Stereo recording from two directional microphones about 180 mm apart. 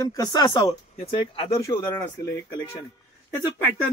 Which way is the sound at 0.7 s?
35° left (ahead or behind).